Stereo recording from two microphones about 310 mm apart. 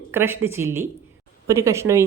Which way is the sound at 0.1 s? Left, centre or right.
Centre.